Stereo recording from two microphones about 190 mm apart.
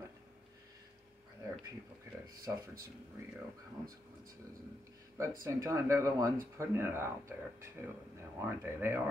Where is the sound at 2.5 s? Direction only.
15° right (ahead or behind).